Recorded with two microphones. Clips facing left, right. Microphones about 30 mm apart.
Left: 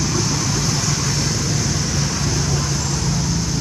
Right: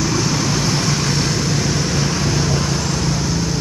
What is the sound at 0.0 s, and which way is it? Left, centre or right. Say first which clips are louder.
Vehicle: right 3 dB; right.